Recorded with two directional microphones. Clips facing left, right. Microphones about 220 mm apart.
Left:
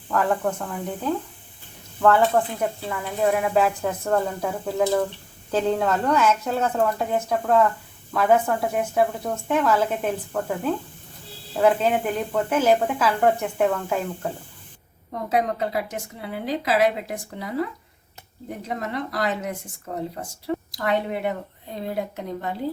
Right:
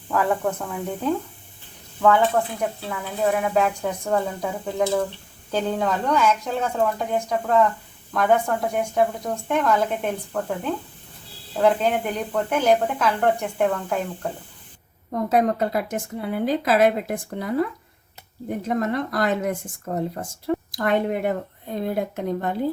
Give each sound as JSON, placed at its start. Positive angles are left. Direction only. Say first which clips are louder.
{"t": 0.1, "sound": "speech", "louder": "even", "side_deg": -10}
{"t": 15.3, "sound": "a woman's voice", "louder": "right 3 dB", "side_deg": -50}
{"t": 18.7, "sound": "a woman's voice", "louder": "right 5 dB", "side_deg": -50}
{"t": 20.7, "sound": "a woman's voice", "louder": "right 2 dB", "side_deg": -50}